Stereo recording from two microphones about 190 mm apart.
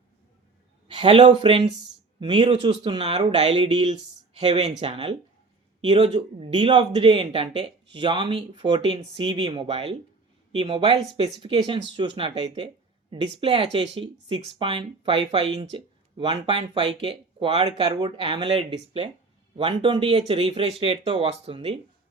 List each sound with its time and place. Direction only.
0.9 s a sound: 25° right (ahead or behind)
1.4 s speech: 30° right (ahead or behind)
1.7 s speech: centre (ahead or behind)
2.2 s speech: 25° right (ahead or behind)